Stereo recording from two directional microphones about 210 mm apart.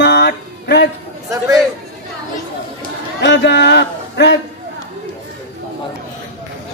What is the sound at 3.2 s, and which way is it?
A man's voice, 55° left (ahead or behind).